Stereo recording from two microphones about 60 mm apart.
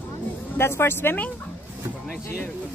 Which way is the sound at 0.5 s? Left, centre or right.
Left.